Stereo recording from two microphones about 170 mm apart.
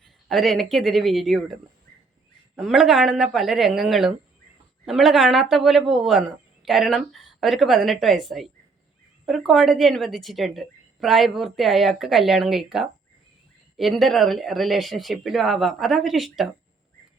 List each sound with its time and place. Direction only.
0.3 s a woman's voice: centre (ahead or behind)
2.6 s a woman's voice: centre (ahead or behind)